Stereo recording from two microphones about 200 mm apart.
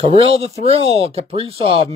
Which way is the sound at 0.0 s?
30° right (ahead or behind).